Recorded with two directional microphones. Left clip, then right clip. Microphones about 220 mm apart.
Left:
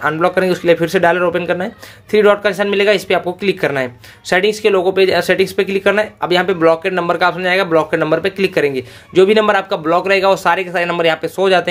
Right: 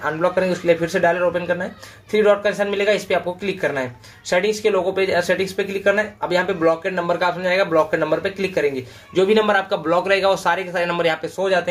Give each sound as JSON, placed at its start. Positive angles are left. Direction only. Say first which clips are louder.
{"t": 0.0, "sound": "speech", "louder": "left 5 dB", "side_deg": 40}